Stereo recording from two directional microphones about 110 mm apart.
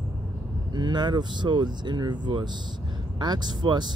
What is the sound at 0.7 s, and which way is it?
Speech, 40° right (ahead or behind).